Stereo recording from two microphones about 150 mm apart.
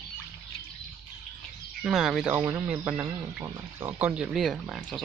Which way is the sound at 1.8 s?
5° right (ahead or behind).